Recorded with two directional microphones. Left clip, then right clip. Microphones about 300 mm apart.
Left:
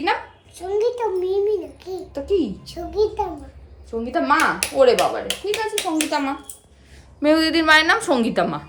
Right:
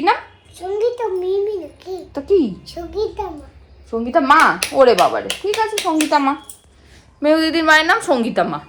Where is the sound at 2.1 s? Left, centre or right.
Centre.